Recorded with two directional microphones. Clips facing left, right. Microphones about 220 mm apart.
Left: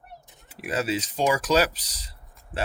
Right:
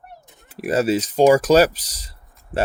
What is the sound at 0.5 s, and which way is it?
Speech, 45° right (ahead or behind).